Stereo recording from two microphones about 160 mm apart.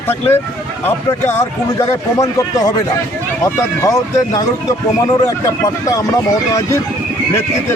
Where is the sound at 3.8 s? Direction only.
20° left (ahead or behind).